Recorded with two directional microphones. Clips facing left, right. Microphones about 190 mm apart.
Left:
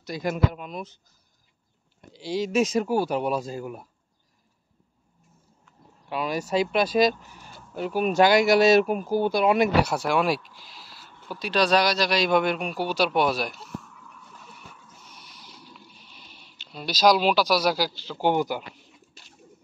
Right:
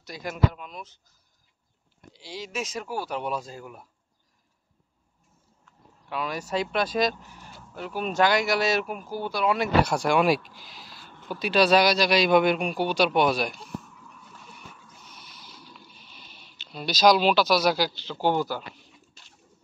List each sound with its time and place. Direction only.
0.0 s speech: 20° left (ahead or behind)
2.1 s speech: 40° left (ahead or behind)
2.4 s speech: 20° left (ahead or behind)
6.1 s speech: 10° left (ahead or behind)
9.8 s speech: 5° left (ahead or behind)
16.7 s speech: 5° left (ahead or behind)